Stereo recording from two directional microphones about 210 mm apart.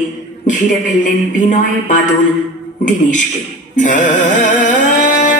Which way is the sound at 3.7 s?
35° left (ahead or behind).